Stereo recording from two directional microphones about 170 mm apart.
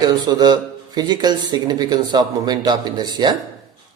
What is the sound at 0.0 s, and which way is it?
Speech, 25° right (ahead or behind).